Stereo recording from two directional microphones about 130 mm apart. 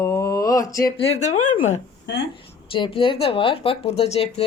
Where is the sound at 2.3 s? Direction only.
40° left (ahead or behind).